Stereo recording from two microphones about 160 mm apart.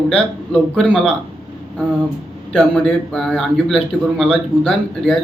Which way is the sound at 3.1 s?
5° left (ahead or behind).